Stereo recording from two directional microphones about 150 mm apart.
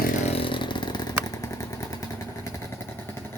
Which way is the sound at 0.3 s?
40° left (ahead or behind).